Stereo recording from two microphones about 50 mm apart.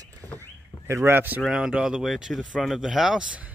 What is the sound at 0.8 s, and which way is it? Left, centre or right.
Speech, right.